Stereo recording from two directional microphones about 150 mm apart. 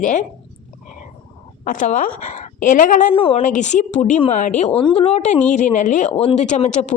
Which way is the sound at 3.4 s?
55° left (ahead or behind).